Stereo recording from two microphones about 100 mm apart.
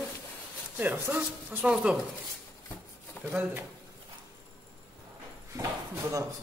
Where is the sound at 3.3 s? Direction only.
20° right (ahead or behind).